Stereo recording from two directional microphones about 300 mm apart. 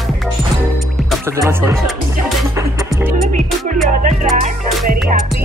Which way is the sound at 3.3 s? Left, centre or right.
Right.